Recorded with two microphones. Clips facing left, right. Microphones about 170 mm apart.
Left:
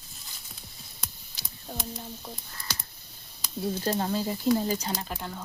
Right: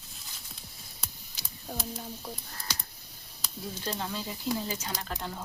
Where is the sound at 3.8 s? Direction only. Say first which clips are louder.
Left 6 dB; 45° left (ahead or behind).